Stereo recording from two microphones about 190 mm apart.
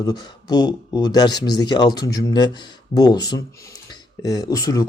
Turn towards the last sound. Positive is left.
turn(degrees=20)  # may be behind; listen again after turning